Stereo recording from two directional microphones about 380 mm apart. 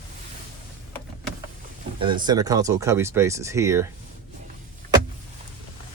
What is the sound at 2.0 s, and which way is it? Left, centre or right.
Speech, centre.